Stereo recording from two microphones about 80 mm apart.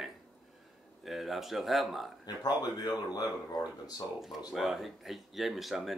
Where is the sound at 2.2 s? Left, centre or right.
Left.